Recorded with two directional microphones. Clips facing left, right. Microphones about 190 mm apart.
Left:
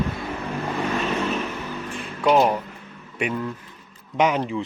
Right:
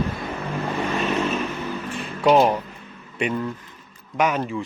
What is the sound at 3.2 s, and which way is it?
Speech, 10° left (ahead or behind).